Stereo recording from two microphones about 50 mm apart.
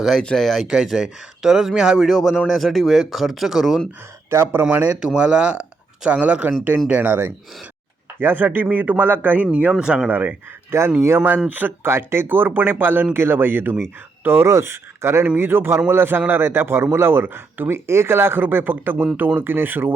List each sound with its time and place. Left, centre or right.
0.2 s speech: centre
0.6 s speech: centre
4.3 s speech: right
4.7 s speech: right
4.9 s speech: centre
7.0 s a man's voice: right
9.7 s speech: centre
10.1 s speech: right
10.7 s speech: right
11.4 s speech: right
11.9 s a man's voice: right
14.4 s a man's voice: right